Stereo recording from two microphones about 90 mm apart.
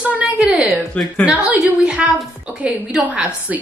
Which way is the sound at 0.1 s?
10° right (ahead or behind).